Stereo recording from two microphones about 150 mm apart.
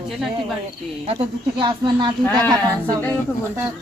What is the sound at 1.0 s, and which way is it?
Speech, 35° right (ahead or behind).